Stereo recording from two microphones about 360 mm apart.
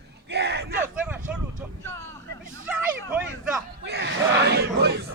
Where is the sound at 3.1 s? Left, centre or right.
Centre.